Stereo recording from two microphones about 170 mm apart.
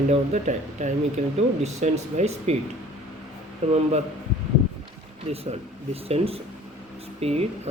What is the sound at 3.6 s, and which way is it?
Speech, 40° right (ahead or behind).